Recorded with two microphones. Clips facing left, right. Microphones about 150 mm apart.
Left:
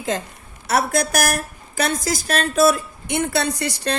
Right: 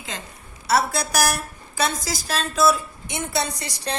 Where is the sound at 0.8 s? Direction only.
55° left (ahead or behind).